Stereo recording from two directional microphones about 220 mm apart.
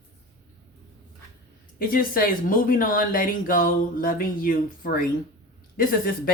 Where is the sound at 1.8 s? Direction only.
40° left (ahead or behind).